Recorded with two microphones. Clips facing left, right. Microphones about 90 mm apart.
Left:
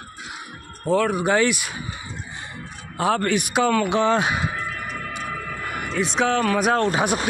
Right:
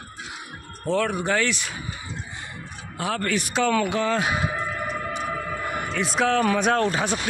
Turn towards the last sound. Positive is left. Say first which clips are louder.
# left 1 dB
turn(degrees=5)  # may be behind; listen again after turning